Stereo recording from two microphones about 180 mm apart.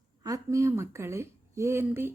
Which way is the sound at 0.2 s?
20° right (ahead or behind).